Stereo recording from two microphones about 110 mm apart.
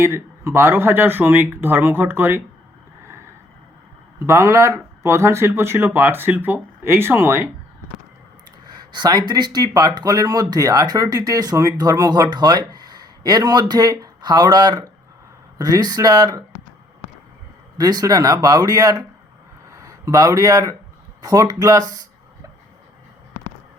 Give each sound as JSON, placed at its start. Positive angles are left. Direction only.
{"t": 0.0, "sound": "speech", "side_deg": -25}
{"t": 4.2, "sound": "speech", "side_deg": -25}
{"t": 8.6, "sound": "speech", "side_deg": -40}
{"t": 17.7, "sound": "speech", "side_deg": -35}